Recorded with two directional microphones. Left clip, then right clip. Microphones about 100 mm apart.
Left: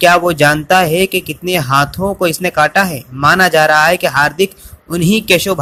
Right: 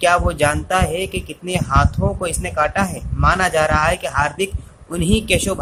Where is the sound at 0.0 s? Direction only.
50° left (ahead or behind).